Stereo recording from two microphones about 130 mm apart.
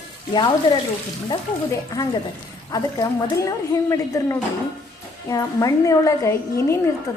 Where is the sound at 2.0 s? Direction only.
25° left (ahead or behind).